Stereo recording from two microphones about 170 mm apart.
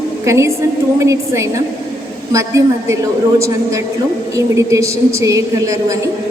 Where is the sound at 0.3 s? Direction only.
15° right (ahead or behind).